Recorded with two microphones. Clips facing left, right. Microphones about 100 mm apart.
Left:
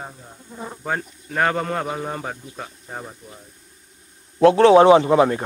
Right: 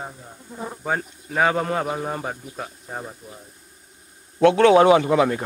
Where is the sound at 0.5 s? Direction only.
5° right (ahead or behind).